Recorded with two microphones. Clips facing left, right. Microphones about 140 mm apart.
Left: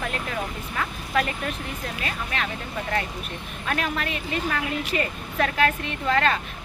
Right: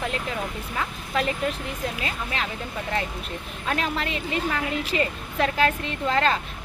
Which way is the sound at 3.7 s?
25° right (ahead or behind).